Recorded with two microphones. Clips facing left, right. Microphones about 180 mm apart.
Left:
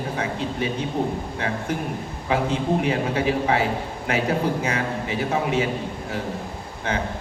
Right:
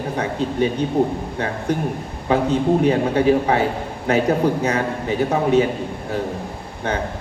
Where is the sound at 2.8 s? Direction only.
35° right (ahead or behind).